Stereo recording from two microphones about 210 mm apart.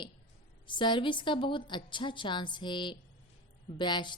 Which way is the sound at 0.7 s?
20° left (ahead or behind).